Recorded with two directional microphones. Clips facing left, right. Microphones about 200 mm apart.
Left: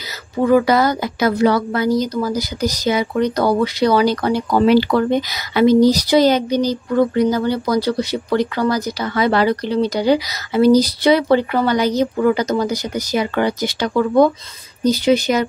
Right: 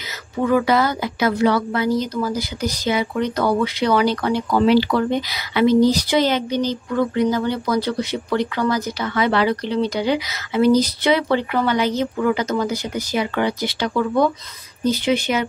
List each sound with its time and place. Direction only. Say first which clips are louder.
0.4 s a woman's voice: left 4 dB; 35° left (ahead or behind)